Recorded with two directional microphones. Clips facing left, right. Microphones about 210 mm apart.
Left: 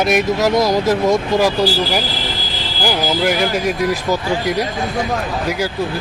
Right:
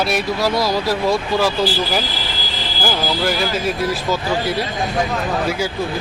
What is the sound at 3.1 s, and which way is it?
Speech, 15° left (ahead or behind).